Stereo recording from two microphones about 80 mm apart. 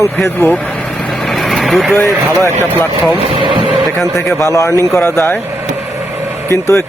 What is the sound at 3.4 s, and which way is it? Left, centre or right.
Speech, right.